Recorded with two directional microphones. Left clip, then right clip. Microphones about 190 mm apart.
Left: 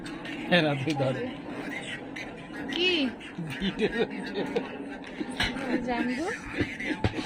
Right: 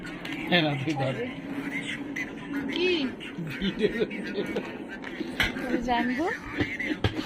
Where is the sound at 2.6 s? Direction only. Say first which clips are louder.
Left 1 dB; 60° left (ahead or behind).